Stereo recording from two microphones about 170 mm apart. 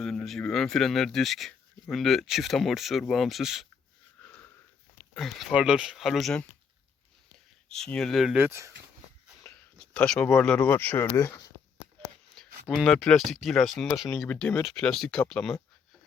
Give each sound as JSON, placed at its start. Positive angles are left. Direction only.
{"t": 0.0, "sound": "speech", "side_deg": 5}
{"t": 4.2, "sound": "wheeze", "side_deg": 5}
{"t": 5.1, "sound": "speech", "side_deg": 0}
{"t": 7.7, "sound": "speech", "side_deg": 5}
{"t": 9.4, "sound": "speech", "side_deg": 10}
{"t": 12.6, "sound": "speech", "side_deg": 0}
{"t": 14.3, "sound": "speech", "side_deg": 10}